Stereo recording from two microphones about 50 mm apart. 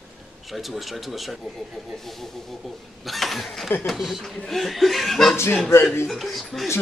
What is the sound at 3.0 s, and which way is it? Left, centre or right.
Speech, centre.